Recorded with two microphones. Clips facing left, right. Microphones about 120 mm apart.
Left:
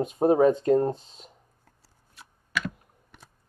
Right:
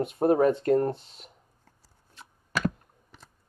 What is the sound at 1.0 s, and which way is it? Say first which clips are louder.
Speech: left 1 dB; 5° right (ahead or behind).